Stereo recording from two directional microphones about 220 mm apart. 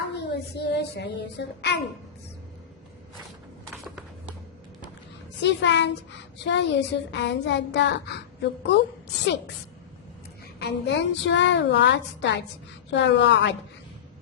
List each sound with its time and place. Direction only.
0.1 s child singing: 50° left (ahead or behind)
5.4 s a child's voice: 55° left (ahead or behind)
10.6 s a child's voice: 50° left (ahead or behind)